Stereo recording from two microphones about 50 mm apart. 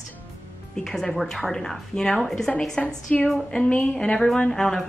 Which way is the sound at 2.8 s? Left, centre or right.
Left.